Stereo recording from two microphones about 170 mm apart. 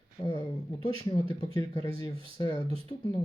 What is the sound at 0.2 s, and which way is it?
Speech, 30° left (ahead or behind).